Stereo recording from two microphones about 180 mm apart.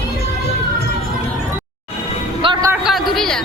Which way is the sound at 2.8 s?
Centre (ahead or behind).